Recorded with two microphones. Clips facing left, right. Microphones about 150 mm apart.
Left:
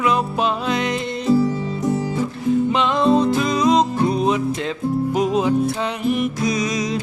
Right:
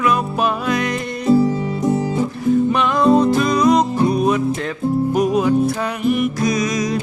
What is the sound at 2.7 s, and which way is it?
Music, 20° left (ahead or behind).